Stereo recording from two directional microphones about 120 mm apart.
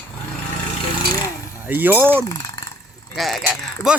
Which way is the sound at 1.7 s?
15° right (ahead or behind).